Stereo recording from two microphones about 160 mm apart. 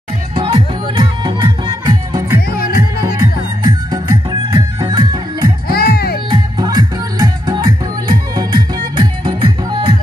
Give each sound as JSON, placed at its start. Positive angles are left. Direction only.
{"t": 0.3, "sound": "music", "side_deg": -30}
{"t": 2.5, "sound": "music", "side_deg": 70}
{"t": 3.0, "sound": "music", "side_deg": -25}
{"t": 5.7, "sound": "music", "side_deg": 75}
{"t": 6.3, "sound": "music", "side_deg": -25}